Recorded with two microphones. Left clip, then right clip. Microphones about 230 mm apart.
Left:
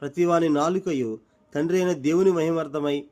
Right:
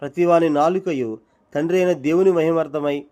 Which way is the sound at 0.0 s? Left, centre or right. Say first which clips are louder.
Right 5 dB; centre.